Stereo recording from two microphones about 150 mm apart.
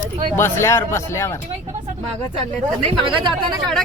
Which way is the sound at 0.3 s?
15° left (ahead or behind).